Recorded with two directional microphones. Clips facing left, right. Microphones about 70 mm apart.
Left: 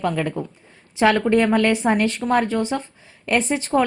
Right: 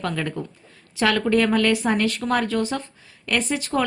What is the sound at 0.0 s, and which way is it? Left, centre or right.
A woman's voice, centre.